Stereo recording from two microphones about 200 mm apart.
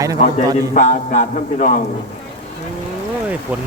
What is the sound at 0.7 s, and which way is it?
Music, 40° left (ahead or behind).